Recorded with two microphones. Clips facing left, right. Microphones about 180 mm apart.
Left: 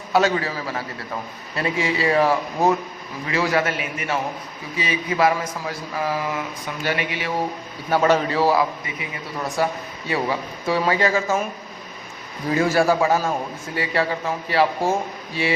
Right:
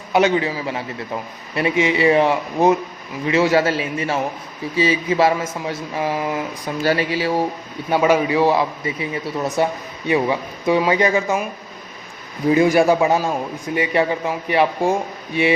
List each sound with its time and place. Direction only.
0.1 s a man's voice: 20° right (ahead or behind)
6.8 s speech: 35° right (ahead or behind)
7.9 s a man's voice: 15° right (ahead or behind)
12.5 s a man's voice: 15° right (ahead or behind)